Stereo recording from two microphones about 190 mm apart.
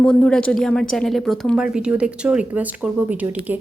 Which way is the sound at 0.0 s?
5° left (ahead or behind).